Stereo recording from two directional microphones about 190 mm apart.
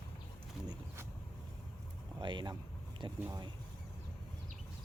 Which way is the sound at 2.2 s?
25° right (ahead or behind).